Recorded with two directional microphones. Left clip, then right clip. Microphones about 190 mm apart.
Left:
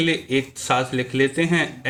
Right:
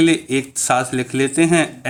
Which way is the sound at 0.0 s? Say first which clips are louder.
Right 5 dB; 55° right (ahead or behind).